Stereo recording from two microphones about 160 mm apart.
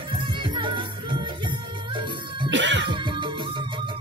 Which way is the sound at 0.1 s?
30° right (ahead or behind).